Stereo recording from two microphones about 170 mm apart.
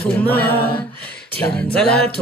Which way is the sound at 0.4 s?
10° left (ahead or behind).